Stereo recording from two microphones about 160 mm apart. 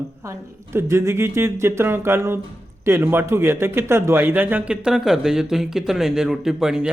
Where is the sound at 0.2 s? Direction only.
15° right (ahead or behind).